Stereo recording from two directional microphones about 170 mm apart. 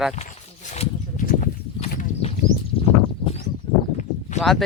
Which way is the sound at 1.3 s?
50° left (ahead or behind).